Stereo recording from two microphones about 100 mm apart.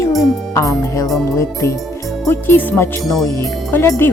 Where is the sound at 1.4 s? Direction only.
30° left (ahead or behind).